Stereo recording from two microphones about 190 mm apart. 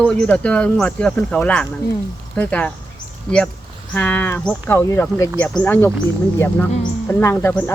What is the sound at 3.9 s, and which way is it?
Speech, 10° left (ahead or behind).